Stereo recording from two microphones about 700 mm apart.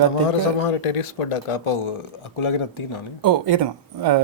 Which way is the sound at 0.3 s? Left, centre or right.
Left.